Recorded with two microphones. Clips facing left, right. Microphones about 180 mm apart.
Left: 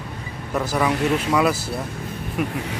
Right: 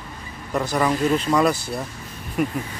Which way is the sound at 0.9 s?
70° left (ahead or behind).